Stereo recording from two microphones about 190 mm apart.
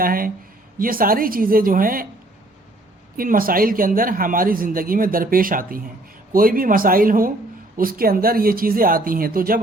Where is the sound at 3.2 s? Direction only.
50° right (ahead or behind).